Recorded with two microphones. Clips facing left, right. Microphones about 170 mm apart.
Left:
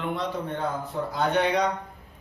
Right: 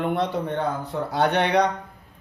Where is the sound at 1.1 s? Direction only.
70° right (ahead or behind).